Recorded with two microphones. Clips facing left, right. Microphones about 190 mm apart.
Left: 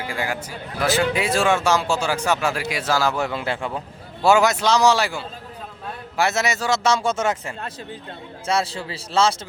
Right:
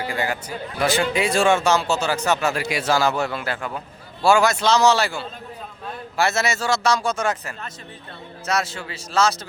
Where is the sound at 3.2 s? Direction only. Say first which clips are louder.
Left 2 dB; 20° left (ahead or behind).